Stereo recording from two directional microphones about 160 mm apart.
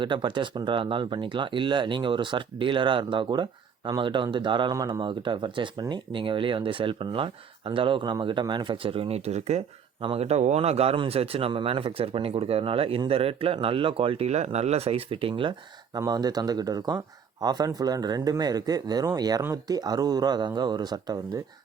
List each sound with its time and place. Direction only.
0.0 s speech: 30° right (ahead or behind)